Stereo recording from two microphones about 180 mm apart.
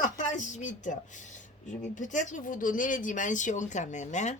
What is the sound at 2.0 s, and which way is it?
Speech, 45° left (ahead or behind).